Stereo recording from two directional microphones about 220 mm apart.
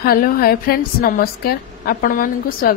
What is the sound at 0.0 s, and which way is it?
A woman's voice, 40° left (ahead or behind).